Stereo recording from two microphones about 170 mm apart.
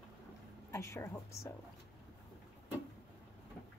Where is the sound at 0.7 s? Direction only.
15° left (ahead or behind).